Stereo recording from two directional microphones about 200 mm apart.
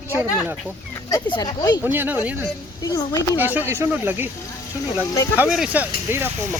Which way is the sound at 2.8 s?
20° left (ahead or behind).